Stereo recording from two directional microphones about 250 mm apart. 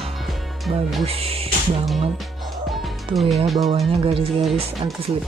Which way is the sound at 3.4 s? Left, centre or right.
Centre.